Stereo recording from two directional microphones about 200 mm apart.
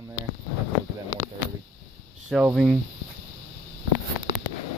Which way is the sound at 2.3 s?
Centre (ahead or behind).